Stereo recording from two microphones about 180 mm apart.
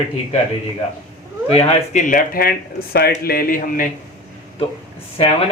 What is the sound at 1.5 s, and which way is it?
Speech, 40° left (ahead or behind).